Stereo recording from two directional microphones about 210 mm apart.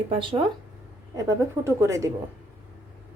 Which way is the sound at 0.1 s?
25° right (ahead or behind).